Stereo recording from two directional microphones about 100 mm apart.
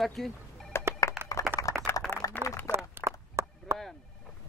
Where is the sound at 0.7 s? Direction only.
25° left (ahead or behind).